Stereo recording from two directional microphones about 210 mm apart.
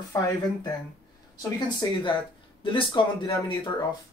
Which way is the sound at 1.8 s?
25° left (ahead or behind).